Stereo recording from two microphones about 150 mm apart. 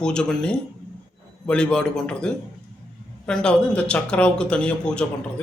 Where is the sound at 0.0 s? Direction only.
5° left (ahead or behind).